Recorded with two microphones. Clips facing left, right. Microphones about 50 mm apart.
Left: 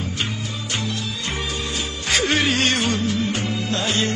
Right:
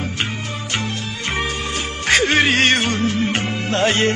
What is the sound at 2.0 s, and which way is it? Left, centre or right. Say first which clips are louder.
Music: right 5 dB; right.